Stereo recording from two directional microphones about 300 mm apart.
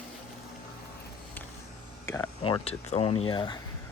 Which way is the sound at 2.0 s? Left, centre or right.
Centre.